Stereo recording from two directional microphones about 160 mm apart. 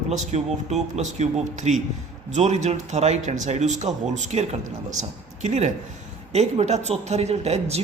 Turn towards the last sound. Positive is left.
turn(degrees=-45)  # may be behind; listen again after turning